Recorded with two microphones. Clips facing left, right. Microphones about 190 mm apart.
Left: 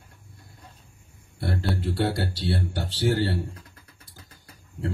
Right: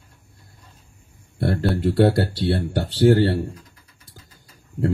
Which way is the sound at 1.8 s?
55° right (ahead or behind).